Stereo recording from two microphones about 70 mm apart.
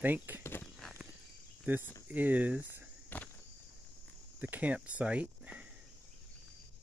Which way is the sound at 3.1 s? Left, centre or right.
Left.